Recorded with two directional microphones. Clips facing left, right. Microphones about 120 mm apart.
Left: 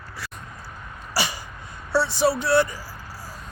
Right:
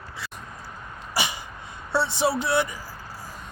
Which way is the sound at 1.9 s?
20° right (ahead or behind).